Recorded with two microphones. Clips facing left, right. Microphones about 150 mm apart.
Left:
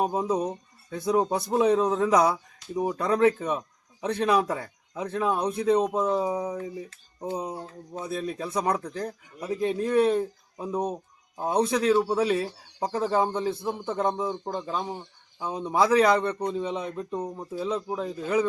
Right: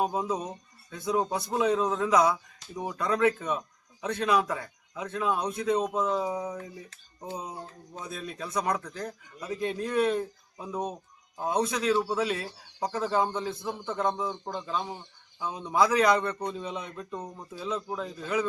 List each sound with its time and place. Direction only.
0.0 s speech: 30° left (ahead or behind)
16.3 s speech: 15° left (ahead or behind)
16.6 s speech: 30° left (ahead or behind)
17.5 s speech: 35° left (ahead or behind)
17.7 s speech: 15° left (ahead or behind)